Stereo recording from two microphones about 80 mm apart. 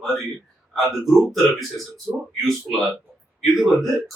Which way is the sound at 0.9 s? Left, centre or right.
Centre.